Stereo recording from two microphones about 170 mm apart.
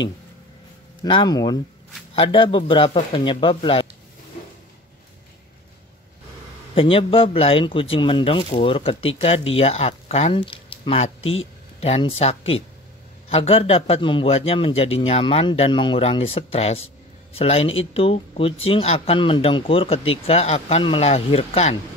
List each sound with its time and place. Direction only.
1.0 s speech: 25° left (ahead or behind)
6.7 s speech: 30° left (ahead or behind)